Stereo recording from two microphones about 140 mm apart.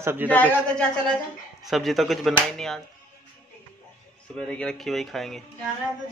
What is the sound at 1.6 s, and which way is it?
Speech, centre (ahead or behind).